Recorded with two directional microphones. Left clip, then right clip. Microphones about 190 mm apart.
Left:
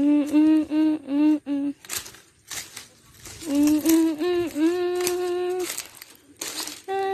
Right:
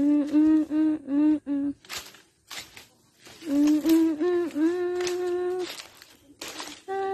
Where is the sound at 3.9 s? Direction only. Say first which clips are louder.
Left 1 dB; 15° right (ahead or behind).